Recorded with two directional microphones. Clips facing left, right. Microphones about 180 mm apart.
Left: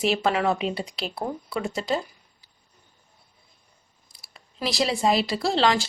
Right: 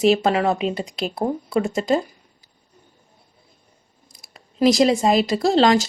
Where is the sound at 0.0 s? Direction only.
40° right (ahead or behind).